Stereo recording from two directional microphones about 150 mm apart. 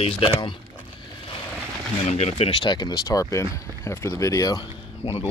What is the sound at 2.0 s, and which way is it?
Speech, 45° left (ahead or behind).